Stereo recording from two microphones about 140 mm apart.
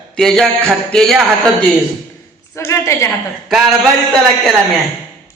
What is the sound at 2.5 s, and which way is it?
Speech, 20° left (ahead or behind).